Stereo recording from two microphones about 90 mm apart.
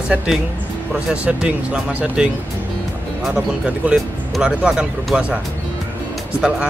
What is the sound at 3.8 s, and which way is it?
Speech, 15° right (ahead or behind).